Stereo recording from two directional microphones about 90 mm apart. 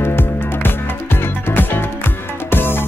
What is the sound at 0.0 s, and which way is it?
Music, 25° left (ahead or behind).